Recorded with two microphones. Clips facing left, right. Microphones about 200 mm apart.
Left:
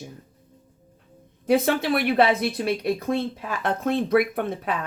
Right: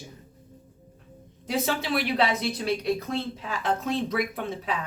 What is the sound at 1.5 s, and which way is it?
Speech, 55° left (ahead or behind).